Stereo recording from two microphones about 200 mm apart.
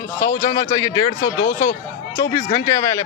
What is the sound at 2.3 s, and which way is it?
Speech, 15° left (ahead or behind).